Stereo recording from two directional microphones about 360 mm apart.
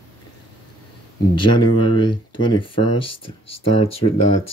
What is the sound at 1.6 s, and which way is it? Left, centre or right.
Speech, left.